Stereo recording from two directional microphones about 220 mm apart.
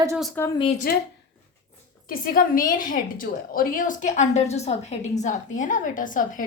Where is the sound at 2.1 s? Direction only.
40° left (ahead or behind).